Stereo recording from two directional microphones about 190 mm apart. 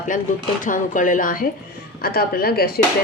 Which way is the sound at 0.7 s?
45° left (ahead or behind).